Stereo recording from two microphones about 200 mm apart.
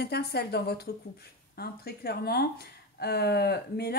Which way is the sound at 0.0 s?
55° left (ahead or behind).